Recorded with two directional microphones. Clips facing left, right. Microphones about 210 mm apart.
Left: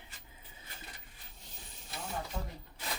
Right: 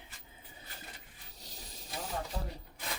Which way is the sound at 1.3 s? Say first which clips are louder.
Right 5 dB; 40° right (ahead or behind).